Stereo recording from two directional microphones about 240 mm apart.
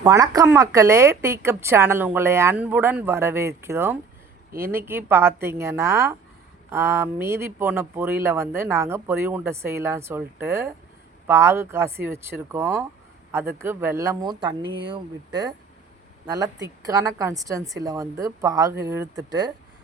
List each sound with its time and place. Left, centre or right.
0.0 s speech: centre